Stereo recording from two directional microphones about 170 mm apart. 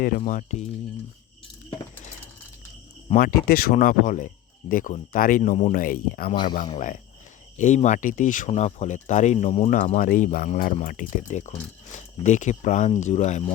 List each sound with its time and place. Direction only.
0.2 s speech: 45° left (ahead or behind)
3.2 s speech: 60° left (ahead or behind); by 5.7 s 40° left (ahead or behind)
5.7 s speech: 55° left (ahead or behind)